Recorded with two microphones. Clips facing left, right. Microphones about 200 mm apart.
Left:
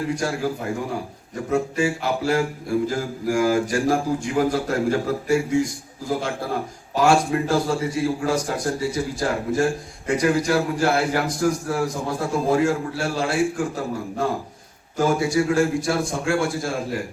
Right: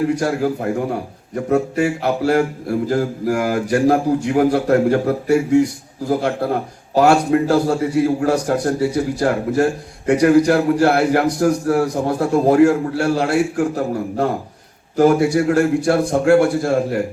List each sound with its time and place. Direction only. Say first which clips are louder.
0.2 s speech: right 6 dB; 60° right (ahead or behind)